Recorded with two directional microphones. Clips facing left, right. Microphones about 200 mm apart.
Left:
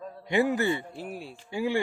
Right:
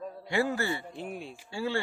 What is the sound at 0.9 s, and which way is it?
Speech, 5° left (ahead or behind).